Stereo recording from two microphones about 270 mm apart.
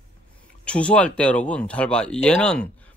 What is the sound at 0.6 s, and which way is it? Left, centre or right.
Speech, centre.